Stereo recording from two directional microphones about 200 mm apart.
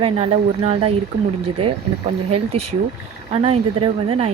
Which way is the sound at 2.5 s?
30° right (ahead or behind).